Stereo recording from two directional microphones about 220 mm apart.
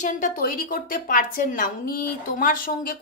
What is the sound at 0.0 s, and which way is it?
A woman's voice, 35° left (ahead or behind).